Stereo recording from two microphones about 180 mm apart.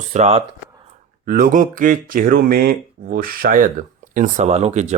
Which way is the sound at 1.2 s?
50° right (ahead or behind).